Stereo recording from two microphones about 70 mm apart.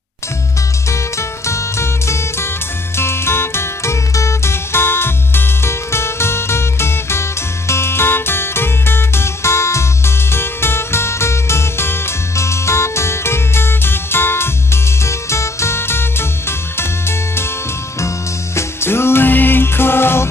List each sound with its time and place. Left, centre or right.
0.8 s music: left
18.0 s music: left